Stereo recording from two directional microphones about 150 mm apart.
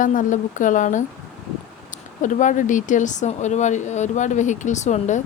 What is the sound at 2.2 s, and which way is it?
Speech, 55° left (ahead or behind).